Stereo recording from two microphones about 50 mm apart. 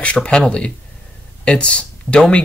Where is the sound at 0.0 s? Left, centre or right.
Left.